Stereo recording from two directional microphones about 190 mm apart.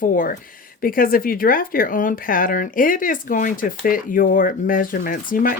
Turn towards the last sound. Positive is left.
turn(degrees=45)  # may be behind; listen again after turning